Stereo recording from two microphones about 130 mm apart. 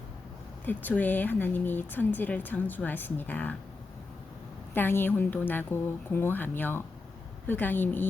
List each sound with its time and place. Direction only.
0.6 s speech: 15° left (ahead or behind)
4.7 s speech: 15° left (ahead or behind)